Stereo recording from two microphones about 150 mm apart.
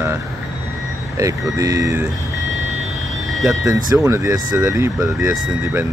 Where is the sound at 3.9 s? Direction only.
20° right (ahead or behind).